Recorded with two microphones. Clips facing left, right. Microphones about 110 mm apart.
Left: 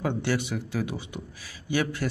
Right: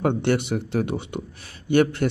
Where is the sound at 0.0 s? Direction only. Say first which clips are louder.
Right 6 dB; 60° right (ahead or behind).